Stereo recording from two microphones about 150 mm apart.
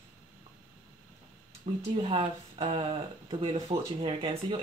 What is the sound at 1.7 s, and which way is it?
Speech, 35° right (ahead or behind).